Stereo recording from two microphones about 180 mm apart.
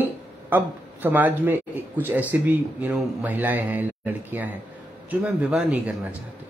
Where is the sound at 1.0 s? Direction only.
10° right (ahead or behind).